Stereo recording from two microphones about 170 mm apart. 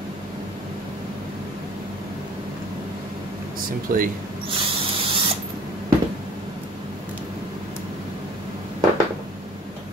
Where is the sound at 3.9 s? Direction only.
55° right (ahead or behind).